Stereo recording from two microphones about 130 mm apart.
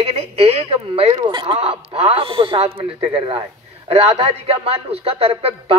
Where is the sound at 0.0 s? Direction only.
50° right (ahead or behind).